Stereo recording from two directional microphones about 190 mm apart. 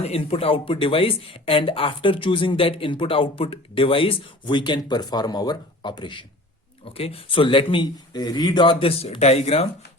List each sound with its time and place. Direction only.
0.0 s speech: 30° left (ahead or behind)